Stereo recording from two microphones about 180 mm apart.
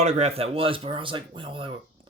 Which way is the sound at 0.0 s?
35° right (ahead or behind).